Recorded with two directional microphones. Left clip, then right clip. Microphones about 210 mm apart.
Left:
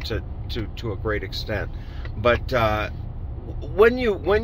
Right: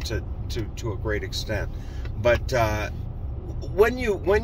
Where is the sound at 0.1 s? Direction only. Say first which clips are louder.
Left 2 dB; 30° left (ahead or behind).